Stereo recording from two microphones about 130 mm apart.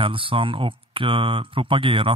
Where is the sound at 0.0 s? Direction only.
40° right (ahead or behind).